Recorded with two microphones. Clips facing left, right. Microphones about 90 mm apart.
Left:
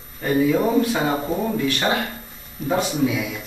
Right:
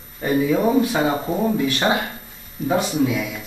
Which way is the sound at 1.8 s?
20° right (ahead or behind).